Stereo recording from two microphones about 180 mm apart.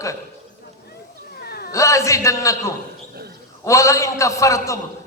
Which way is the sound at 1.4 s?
60° left (ahead or behind).